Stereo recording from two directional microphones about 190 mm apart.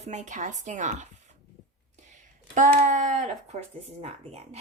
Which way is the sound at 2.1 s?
40° right (ahead or behind).